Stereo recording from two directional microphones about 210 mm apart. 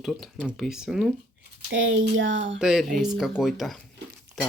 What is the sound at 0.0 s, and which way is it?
Speech, centre (ahead or behind).